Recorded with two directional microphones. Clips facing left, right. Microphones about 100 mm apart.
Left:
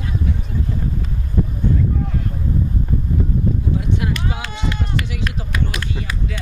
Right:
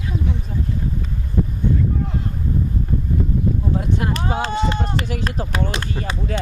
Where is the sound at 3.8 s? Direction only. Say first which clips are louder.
Even; 40° right (ahead or behind).